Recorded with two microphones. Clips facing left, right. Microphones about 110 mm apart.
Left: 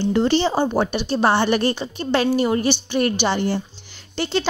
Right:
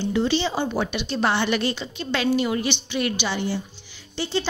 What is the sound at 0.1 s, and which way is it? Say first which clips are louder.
Speech: left 4 dB; 50° left (ahead or behind).